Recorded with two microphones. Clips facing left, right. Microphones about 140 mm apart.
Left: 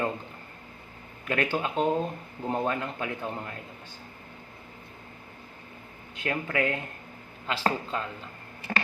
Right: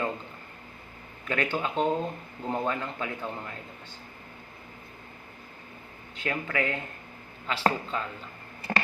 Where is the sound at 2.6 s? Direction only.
45° left (ahead or behind).